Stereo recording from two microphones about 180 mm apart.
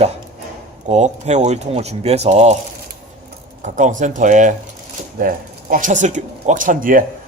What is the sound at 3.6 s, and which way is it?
A man's voice, 45° right (ahead or behind).